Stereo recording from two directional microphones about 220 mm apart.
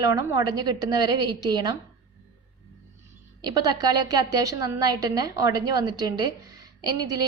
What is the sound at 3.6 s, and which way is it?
A woman's voice, 20° right (ahead or behind).